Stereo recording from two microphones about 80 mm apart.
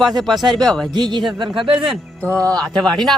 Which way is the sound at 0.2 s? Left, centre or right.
Centre.